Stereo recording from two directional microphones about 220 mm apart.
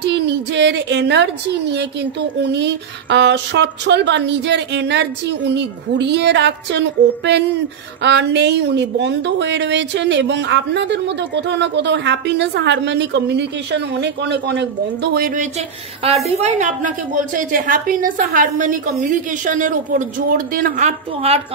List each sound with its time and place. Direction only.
0.0 s a woman's voice: 50° right (ahead or behind)
16.3 s a woman's voice: 30° right (ahead or behind)